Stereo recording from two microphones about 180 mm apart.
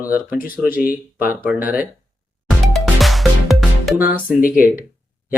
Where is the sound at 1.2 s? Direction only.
50° left (ahead or behind).